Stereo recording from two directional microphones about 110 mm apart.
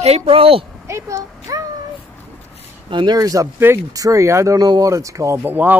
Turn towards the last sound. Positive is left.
turn(degrees=-25)  # may be behind; listen again after turning